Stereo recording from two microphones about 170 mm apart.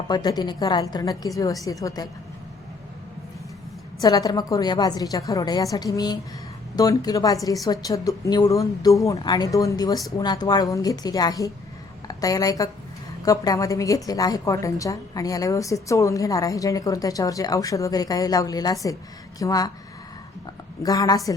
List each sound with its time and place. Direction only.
0.1 s a woman's voice: 25° left (ahead or behind)
4.0 s a woman's voice: 20° left (ahead or behind)
20.8 s a woman's voice: 20° left (ahead or behind)